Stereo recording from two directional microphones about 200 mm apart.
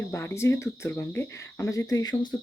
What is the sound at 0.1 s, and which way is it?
Speech, 10° left (ahead or behind).